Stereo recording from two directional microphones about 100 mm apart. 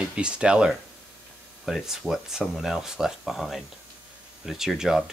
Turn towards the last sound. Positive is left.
turn(degrees=-5)  # may be behind; listen again after turning